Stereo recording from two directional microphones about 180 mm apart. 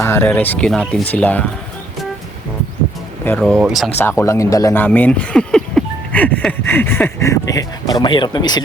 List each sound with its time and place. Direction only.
0.0 s speech: 10° left (ahead or behind)
3.2 s speech: 5° left (ahead or behind)
3.9 s speech: 10° left (ahead or behind)